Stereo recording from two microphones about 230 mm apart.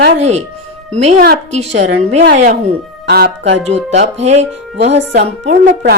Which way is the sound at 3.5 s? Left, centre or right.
Right.